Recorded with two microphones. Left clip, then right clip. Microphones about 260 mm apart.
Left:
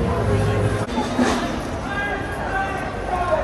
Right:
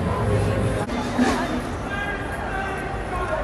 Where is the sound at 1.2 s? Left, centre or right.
Left.